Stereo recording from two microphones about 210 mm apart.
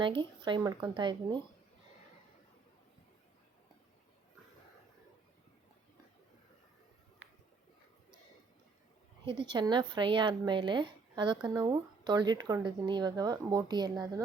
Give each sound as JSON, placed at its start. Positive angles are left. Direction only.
{"t": 0.0, "sound": "speech", "side_deg": -25}
{"t": 9.2, "sound": "speech", "side_deg": -25}